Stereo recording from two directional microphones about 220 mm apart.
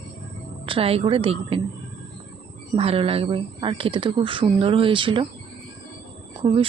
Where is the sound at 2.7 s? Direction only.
25° right (ahead or behind).